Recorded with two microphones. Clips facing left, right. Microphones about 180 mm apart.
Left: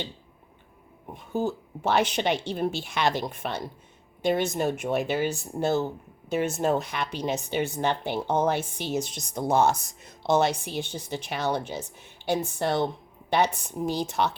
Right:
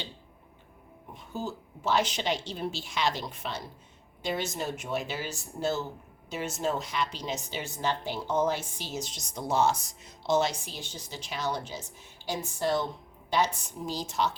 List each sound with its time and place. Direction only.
1.1 s speech: 60° left (ahead or behind)